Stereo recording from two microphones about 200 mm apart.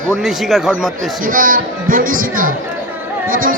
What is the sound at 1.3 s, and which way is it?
Speech, 45° right (ahead or behind).